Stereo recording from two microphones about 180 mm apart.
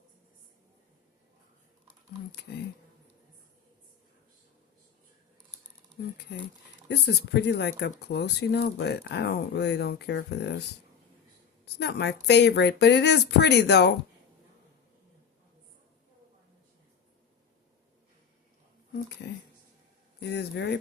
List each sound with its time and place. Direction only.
6.8 s speech: 65° left (ahead or behind)
11.6 s speech: 70° left (ahead or behind)
19.2 s speech: 80° left
20.1 s speech: 70° left (ahead or behind)